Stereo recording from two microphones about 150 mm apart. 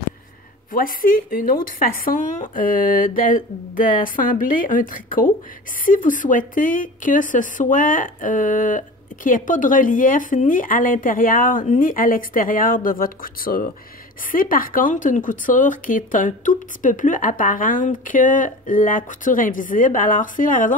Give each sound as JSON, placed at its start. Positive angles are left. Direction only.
{"t": 0.7, "sound": "speech", "side_deg": 70}